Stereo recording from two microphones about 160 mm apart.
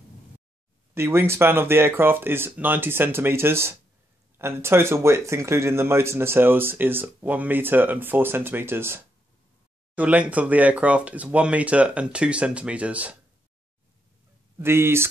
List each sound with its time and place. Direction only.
0.9 s speech: 15° right (ahead or behind)
14.6 s speech: 15° right (ahead or behind)